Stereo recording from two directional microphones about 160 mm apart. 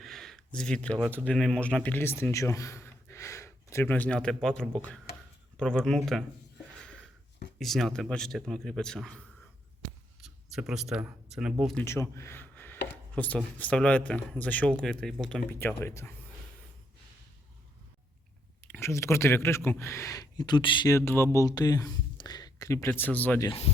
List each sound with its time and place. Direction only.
0.0 s a sound: centre (ahead or behind)
1.1 s speech: 5° left (ahead or behind)
6.7 s a sound: 5° left (ahead or behind)
7.6 s speech: centre (ahead or behind)
10.2 s speech: centre (ahead or behind)
11.9 s a sound: 15° left (ahead or behind)
13.1 s speech: 10° left (ahead or behind)
18.6 s speech: 15° left (ahead or behind)
23.5 s speech: 40° left (ahead or behind)